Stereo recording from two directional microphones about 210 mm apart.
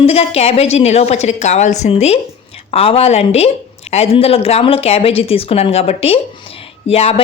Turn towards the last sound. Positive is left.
turn(degrees=30)  # may be behind; listen again after turning